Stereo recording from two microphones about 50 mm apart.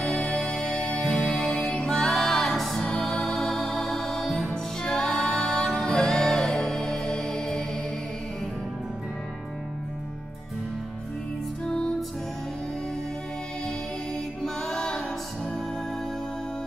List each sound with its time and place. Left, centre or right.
0.0 s music: centre
4.5 s music: centre
11.6 s music: centre
14.4 s a capella: centre